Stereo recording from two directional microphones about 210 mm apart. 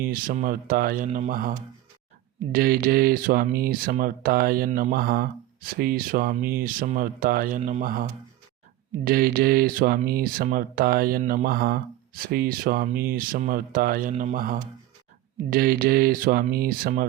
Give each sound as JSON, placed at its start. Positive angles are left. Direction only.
{"t": 0.0, "sound": "speech", "side_deg": -45}
{"t": 9.0, "sound": "speech", "side_deg": -45}